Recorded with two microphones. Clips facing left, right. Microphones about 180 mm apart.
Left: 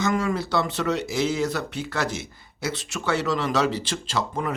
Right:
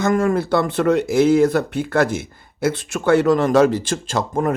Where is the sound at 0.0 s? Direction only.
50° right (ahead or behind).